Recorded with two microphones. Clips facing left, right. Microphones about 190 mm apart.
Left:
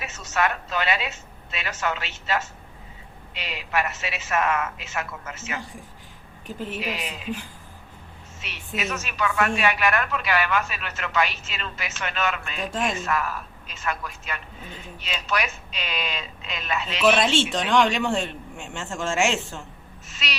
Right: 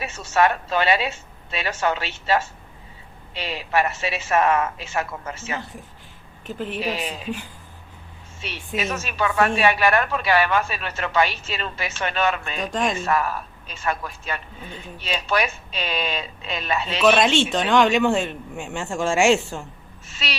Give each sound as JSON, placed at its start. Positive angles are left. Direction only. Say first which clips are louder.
{"t": 0.0, "sound": "a woman's voice", "louder": "right 5 dB", "side_deg": -30}
{"t": 6.7, "sound": "a woman's voice", "louder": "right 5 dB", "side_deg": -30}
{"t": 8.4, "sound": "a woman's voice", "louder": "right 4 dB", "side_deg": -30}
{"t": 12.7, "sound": "speech", "louder": "right 3 dB", "side_deg": 5}
{"t": 13.1, "sound": "a woman's voice", "louder": "right 4 dB", "side_deg": -30}
{"t": 17.1, "sound": "speech", "louder": "right 2 dB", "side_deg": 0}